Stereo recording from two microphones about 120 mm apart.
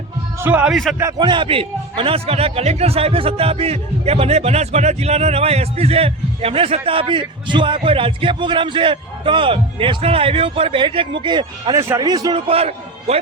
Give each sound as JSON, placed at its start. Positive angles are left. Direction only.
{"t": 0.3, "sound": "a man's voice", "side_deg": -15}
{"t": 0.7, "sound": "a man's voice", "side_deg": 0}
{"t": 1.2, "sound": "a man's voice", "side_deg": -45}
{"t": 12.5, "sound": "a man's voice", "side_deg": -60}